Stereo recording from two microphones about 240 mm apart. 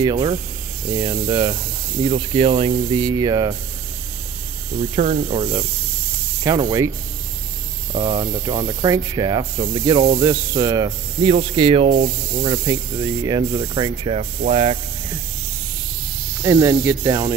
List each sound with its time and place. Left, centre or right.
0.0 s speech: centre
4.9 s speech: right
7.9 s speech: right
16.4 s speech: centre